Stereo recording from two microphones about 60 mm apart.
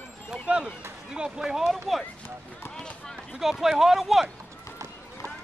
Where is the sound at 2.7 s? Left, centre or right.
Centre.